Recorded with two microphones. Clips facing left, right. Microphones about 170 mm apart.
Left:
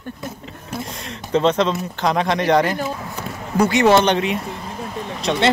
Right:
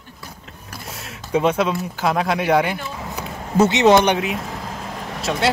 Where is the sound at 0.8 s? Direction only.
5° right (ahead or behind).